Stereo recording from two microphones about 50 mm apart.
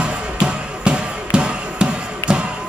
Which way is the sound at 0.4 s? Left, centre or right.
Centre.